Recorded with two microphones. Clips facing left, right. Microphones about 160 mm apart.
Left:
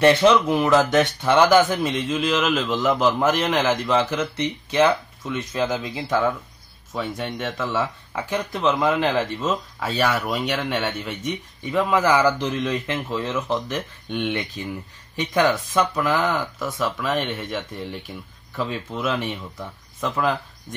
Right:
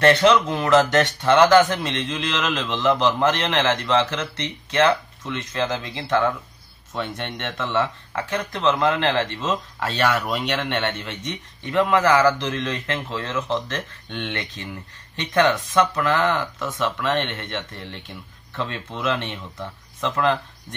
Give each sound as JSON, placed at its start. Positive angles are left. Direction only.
{"t": 0.0, "sound": "speech", "side_deg": 15}